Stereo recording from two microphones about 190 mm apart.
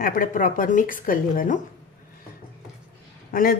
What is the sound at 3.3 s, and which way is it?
Speech, 50° left (ahead or behind).